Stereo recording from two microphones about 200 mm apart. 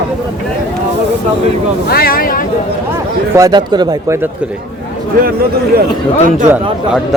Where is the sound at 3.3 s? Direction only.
20° right (ahead or behind).